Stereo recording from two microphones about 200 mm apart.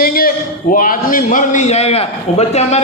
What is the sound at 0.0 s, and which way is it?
A man's voice, 50° left (ahead or behind).